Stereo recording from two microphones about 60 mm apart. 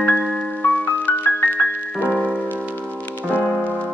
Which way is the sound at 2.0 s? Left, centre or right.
Centre.